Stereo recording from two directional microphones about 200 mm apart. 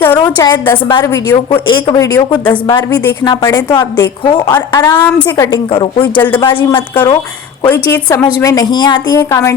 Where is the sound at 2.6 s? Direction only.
25° left (ahead or behind).